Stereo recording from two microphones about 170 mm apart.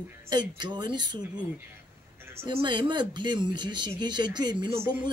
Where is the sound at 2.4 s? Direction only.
25° right (ahead or behind).